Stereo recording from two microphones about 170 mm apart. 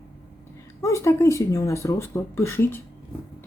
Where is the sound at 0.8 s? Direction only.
15° left (ahead or behind).